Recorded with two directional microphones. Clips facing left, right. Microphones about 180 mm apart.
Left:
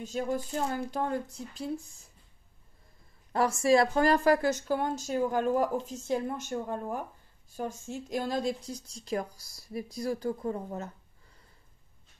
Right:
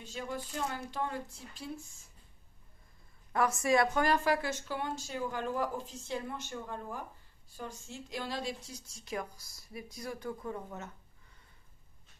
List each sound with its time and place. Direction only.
0.0 s speech: 45° left (ahead or behind)
3.3 s speech: 30° left (ahead or behind)